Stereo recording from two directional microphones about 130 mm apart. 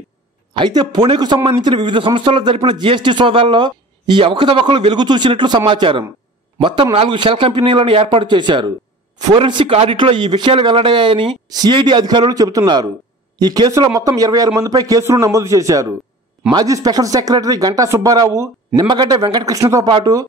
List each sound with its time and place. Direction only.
0.6 s speech: 35° right (ahead or behind)